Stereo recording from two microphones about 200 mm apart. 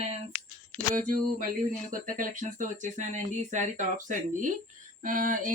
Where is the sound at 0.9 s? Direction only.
45° right (ahead or behind).